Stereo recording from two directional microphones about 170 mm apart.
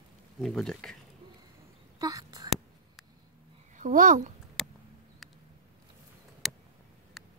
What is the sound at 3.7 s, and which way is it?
Speech, 50° right (ahead or behind).